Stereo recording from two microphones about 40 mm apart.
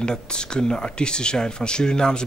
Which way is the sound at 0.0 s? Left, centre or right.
Left.